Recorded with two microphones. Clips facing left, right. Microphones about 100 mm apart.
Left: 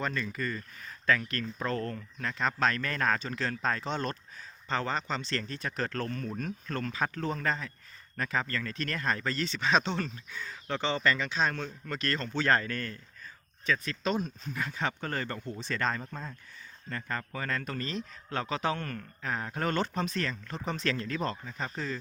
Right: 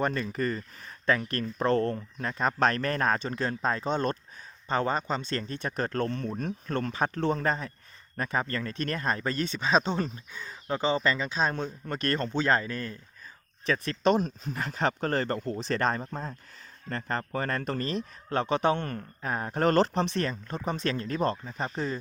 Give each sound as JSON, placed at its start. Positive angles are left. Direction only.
{"t": 0.1, "sound": "speech", "side_deg": -35}
{"t": 3.8, "sound": "speech", "side_deg": -45}
{"t": 4.7, "sound": "speech", "side_deg": -20}
{"t": 4.9, "sound": "speech", "side_deg": -40}
{"t": 9.9, "sound": "speech", "side_deg": -15}
{"t": 11.0, "sound": "speech", "side_deg": -30}
{"t": 12.3, "sound": "speech", "side_deg": -20}
{"t": 14.0, "sound": "speech", "side_deg": -60}
{"t": 18.3, "sound": "speech", "side_deg": -25}